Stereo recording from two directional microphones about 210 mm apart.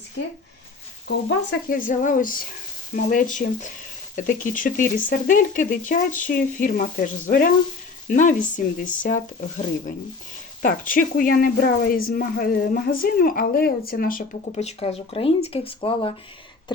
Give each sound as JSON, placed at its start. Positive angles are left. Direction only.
{"t": 1.0, "sound": "a woman's voice", "side_deg": 55}
{"t": 1.9, "sound": "a woman's voice", "side_deg": 40}